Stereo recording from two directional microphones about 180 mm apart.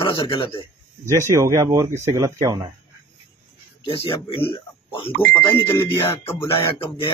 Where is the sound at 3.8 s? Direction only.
30° left (ahead or behind).